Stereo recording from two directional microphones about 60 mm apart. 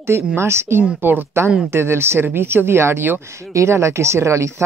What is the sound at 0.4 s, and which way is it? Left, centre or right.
A man's voice, right.